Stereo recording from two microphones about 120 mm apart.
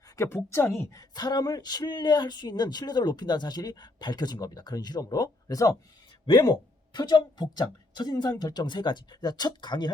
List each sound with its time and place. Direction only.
0.2 s speech: 20° left (ahead or behind)
6.9 s speech: 35° left (ahead or behind)